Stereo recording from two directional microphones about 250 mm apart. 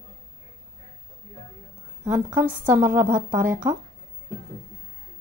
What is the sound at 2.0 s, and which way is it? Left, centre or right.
A woman's voice, centre.